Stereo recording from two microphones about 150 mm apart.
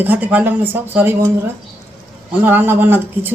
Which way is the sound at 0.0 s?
10° right (ahead or behind).